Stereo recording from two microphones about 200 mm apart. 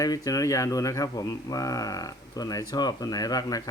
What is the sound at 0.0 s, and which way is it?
Speech, 15° left (ahead or behind).